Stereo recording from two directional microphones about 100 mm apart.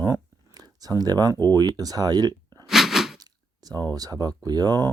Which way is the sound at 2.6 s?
Centre (ahead or behind).